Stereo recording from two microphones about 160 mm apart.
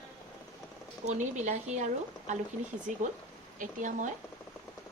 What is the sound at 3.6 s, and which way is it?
Speech, 55° right (ahead or behind).